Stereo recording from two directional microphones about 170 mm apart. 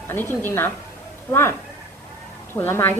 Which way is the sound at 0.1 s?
10° left (ahead or behind).